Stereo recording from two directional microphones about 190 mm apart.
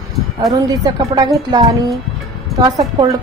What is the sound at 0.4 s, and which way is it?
A woman's voice, 20° right (ahead or behind).